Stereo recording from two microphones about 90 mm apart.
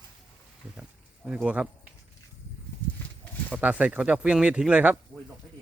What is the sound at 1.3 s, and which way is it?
Speech, 10° right (ahead or behind).